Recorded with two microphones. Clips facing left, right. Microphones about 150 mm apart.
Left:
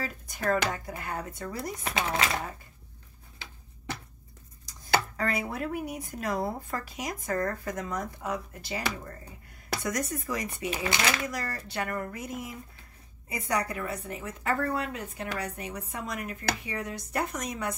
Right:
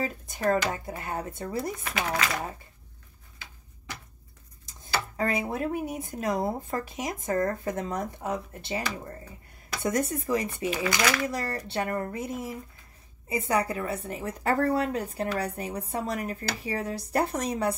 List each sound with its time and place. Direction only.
0.5 s speech: 25° right (ahead or behind)
1.8 s speech: 25° left (ahead or behind)
5.1 s speech: 25° right (ahead or behind)
10.8 s speech: 25° left (ahead or behind)
11.2 s a woman's voice: 30° right (ahead or behind)